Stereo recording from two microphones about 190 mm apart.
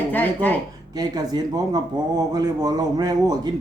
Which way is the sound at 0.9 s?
20° right (ahead or behind).